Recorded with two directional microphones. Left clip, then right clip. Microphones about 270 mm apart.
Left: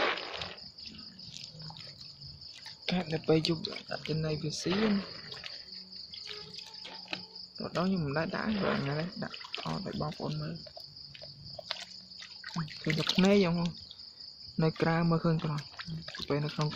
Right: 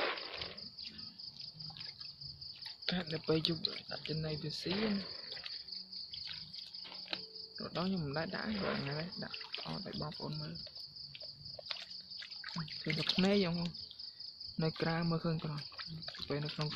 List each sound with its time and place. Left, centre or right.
0.0 s a sound: centre
2.9 s speech: centre
7.1 s cricket: centre
12.5 s speech: centre